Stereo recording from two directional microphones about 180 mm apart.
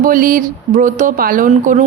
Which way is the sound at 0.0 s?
50° right (ahead or behind).